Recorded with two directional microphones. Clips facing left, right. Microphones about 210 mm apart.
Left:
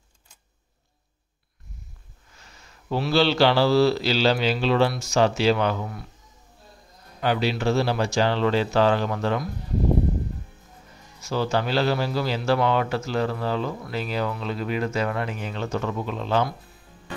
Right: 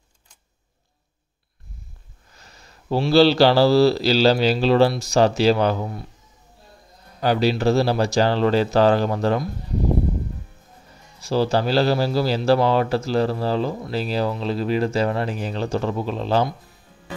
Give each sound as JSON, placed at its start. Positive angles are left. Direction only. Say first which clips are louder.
{"t": 2.3, "sound": "a man's voice", "louder": "right 2 dB", "side_deg": -40}
{"t": 7.2, "sound": "a man's voice", "louder": "right 4 dB", "side_deg": -40}
{"t": 11.1, "sound": "a man's voice", "louder": "right 4 dB", "side_deg": -35}